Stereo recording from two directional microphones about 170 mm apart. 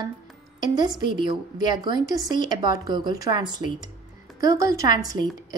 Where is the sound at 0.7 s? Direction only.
25° right (ahead or behind).